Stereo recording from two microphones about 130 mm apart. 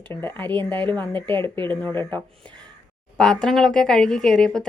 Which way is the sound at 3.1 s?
5° left (ahead or behind).